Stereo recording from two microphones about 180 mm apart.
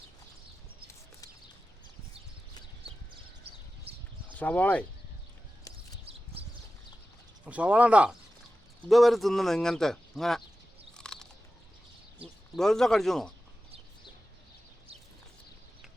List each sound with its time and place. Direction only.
3.5 s a sound: 35° right (ahead or behind)
4.4 s speech: 10° left (ahead or behind)
7.4 s speech: 5° right (ahead or behind)
10.9 s biting: 5° left (ahead or behind)
12.5 s speech: centre (ahead or behind)